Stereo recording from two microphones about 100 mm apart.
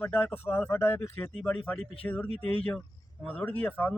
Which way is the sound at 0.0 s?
20° left (ahead or behind).